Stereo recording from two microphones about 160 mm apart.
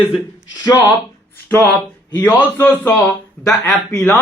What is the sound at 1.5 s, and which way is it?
A man's voice, 10° left (ahead or behind).